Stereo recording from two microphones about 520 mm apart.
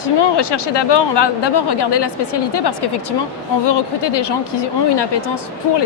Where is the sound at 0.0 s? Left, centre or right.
Left.